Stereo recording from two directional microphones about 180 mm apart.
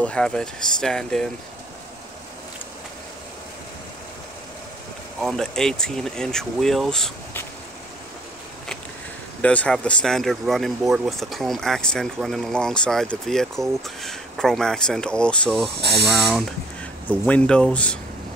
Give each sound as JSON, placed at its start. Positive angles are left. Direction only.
{"t": 0.0, "sound": "speech", "side_deg": 5}
{"t": 5.2, "sound": "speech", "side_deg": 5}
{"t": 9.4, "sound": "speech", "side_deg": 5}
{"t": 15.8, "sound": "speech", "side_deg": -65}
{"t": 16.2, "sound": "speech", "side_deg": 0}